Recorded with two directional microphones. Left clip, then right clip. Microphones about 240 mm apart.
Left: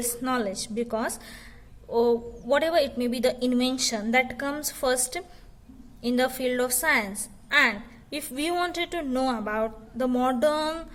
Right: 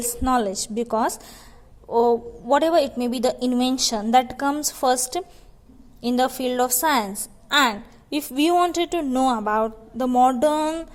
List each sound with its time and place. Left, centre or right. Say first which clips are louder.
0.0 s a woman's voice: right 6 dB; centre